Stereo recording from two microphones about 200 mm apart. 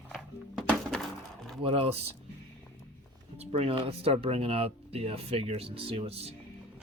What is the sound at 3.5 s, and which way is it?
Speech, 30° right (ahead or behind).